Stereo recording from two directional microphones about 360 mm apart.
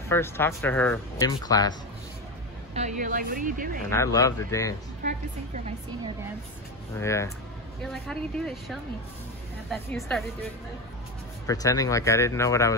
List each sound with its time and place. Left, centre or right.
0.1 s speech: centre
2.7 s speech: right
3.9 s speech: centre
5.0 s speech: centre
7.0 s speech: centre
11.4 s speech: centre